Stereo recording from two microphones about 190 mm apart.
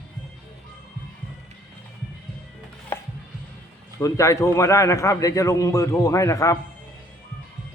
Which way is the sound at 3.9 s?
15° left (ahead or behind).